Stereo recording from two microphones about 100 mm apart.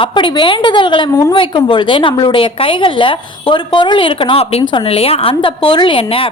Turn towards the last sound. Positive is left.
turn(degrees=65)  # may be behind; listen again after turning